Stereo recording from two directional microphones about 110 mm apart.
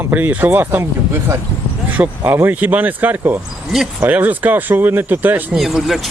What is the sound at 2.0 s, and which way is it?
Speech, 20° right (ahead or behind).